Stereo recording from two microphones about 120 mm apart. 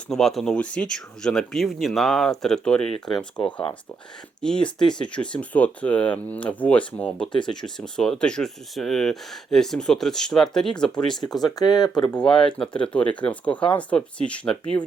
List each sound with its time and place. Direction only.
0.1 s speech: centre (ahead or behind)
4.4 s speech: 5° left (ahead or behind)
11.3 s speech: 35° left (ahead or behind)
12.1 s speech: 5° left (ahead or behind)